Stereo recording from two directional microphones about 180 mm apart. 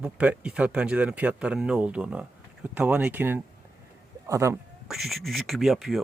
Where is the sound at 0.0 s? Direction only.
5° right (ahead or behind).